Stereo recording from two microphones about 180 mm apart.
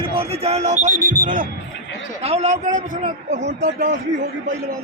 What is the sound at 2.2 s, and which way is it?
Speech, 35° right (ahead or behind).